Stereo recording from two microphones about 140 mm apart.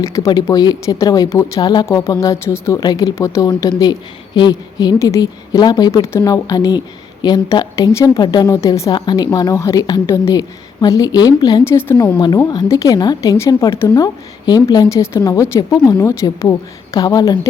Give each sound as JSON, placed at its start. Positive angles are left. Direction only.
{"t": 0.0, "sound": "a woman's voice", "side_deg": 25}